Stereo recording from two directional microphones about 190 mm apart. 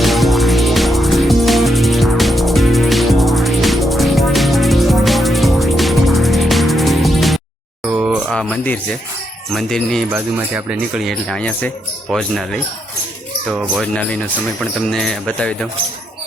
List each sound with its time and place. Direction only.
0.0 s music: centre (ahead or behind)
7.9 s speech: 10° right (ahead or behind)
10.1 s speech: 10° right (ahead or behind)